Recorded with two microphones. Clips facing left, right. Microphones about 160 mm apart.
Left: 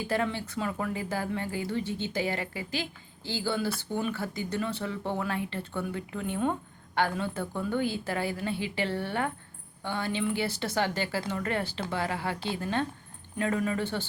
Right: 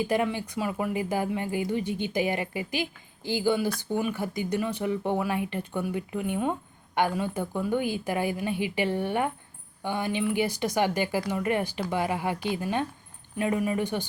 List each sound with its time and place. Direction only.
0.0 s speech: 15° right (ahead or behind)